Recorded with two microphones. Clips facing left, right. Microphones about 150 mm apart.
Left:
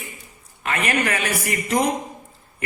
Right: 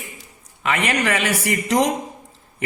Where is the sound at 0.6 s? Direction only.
90° right.